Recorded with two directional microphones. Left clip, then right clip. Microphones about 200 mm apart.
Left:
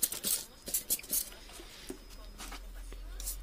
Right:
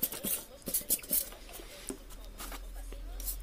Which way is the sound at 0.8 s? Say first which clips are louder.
Even; 10° right (ahead or behind).